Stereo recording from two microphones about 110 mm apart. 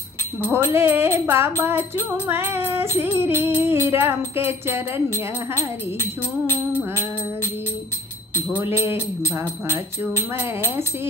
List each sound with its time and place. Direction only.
0.7 s music: 20° right (ahead or behind)
5.1 s speech: 20° left (ahead or behind)
6.4 s music: 15° left (ahead or behind)